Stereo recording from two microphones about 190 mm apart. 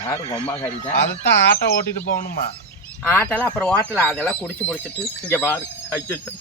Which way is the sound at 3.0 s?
10° left (ahead or behind).